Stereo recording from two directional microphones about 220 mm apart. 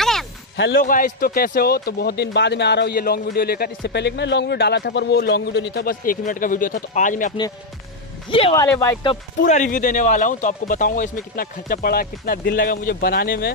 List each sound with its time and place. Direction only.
0.0 s a sound: centre (ahead or behind)
0.7 s speech: 40° left (ahead or behind)
8.3 s speech: 25° left (ahead or behind)
9.4 s speech: 35° left (ahead or behind)